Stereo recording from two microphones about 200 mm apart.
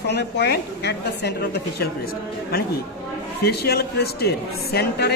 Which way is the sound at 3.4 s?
55° left (ahead or behind).